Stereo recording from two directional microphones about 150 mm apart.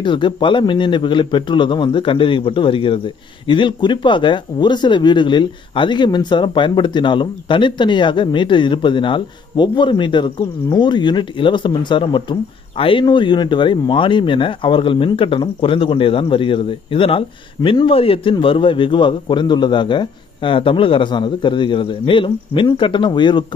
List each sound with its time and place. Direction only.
0.0 s speech: 30° left (ahead or behind)